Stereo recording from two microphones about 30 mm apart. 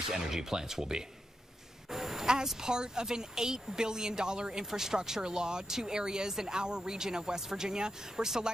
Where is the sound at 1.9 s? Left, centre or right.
Centre.